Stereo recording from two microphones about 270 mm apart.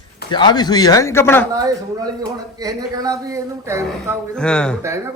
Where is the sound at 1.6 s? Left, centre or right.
Centre.